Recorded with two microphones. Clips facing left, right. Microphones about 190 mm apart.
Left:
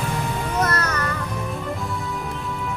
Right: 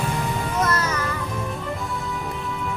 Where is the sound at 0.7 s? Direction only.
65° left (ahead or behind).